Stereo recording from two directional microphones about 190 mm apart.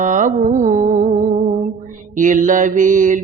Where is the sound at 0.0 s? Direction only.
40° right (ahead or behind).